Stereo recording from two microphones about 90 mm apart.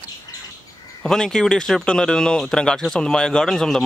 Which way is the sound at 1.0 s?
5° left (ahead or behind).